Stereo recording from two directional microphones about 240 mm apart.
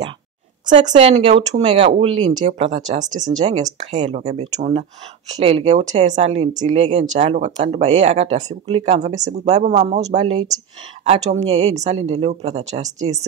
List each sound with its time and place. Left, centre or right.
0.7 s speech: right
3.1 s speech: centre
3.9 s speech: right